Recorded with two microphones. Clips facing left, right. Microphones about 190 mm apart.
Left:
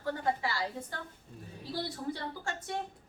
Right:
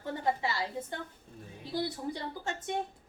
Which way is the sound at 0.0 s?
25° right (ahead or behind).